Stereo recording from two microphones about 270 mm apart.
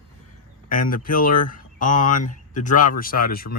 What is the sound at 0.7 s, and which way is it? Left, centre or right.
Speech, left.